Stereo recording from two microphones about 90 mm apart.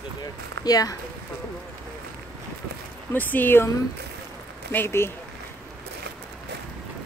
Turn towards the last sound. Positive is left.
turn(degrees=25)  # may be behind; listen again after turning